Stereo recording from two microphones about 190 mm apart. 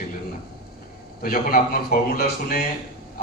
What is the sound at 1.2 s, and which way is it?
A man's voice, 50° left (ahead or behind).